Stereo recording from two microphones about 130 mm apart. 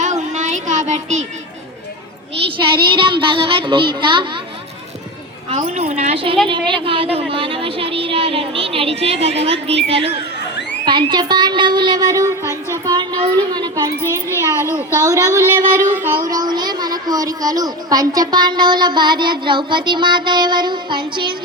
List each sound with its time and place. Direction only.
0.0 s child singing: 70° right (ahead or behind)
2.6 s a woman's voice: 40° right (ahead or behind)
5.7 s a woman's voice: 55° right (ahead or behind)
10.8 s a woman's voice: 35° right (ahead or behind)
14.0 s a child's voice: 20° left (ahead or behind)
15.0 s child singing: 25° right (ahead or behind)
16.3 s a woman's voice: 30° right (ahead or behind)